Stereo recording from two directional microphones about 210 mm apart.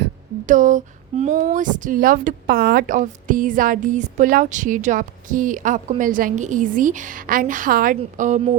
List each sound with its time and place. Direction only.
0.4 s a woman's voice: 40° right (ahead or behind)